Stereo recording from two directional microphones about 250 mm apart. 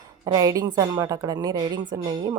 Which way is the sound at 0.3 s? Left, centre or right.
Centre.